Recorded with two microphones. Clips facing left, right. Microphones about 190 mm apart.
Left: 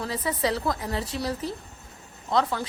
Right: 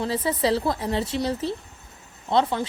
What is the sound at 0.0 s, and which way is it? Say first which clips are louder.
A woman's voice: right 4 dB; 25° right (ahead or behind).